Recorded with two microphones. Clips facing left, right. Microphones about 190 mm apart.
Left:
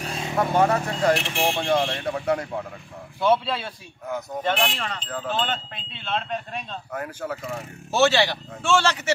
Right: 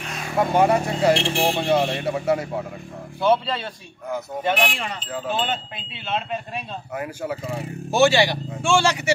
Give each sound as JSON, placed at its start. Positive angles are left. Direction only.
{"t": 0.0, "sound": "vehicle", "side_deg": 25}
{"t": 0.4, "sound": "speech", "side_deg": -15}
{"t": 1.1, "sound": "speech", "side_deg": -30}
{"t": 1.6, "sound": "speech", "side_deg": -5}
{"t": 4.4, "sound": "speech", "side_deg": -10}